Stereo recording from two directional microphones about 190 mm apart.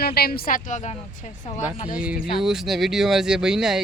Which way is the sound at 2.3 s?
Centre (ahead or behind).